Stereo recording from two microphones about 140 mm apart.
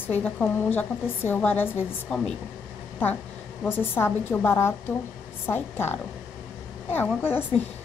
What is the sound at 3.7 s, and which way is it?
A woman's voice, 15° left (ahead or behind).